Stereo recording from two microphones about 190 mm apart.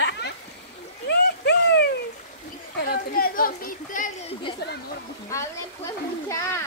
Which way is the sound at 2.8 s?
50° left (ahead or behind).